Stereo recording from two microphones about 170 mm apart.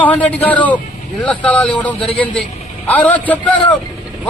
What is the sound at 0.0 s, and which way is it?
Speech, 10° left (ahead or behind).